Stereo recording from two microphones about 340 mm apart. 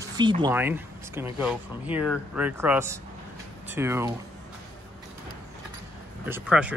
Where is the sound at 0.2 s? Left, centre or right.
Centre.